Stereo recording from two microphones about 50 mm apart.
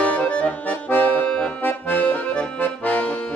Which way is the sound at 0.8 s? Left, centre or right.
Left.